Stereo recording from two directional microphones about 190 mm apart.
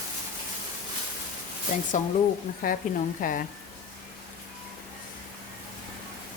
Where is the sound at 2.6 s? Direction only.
50° left (ahead or behind).